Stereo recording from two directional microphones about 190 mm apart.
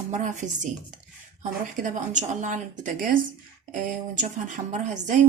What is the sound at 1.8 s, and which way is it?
Speech, 40° right (ahead or behind).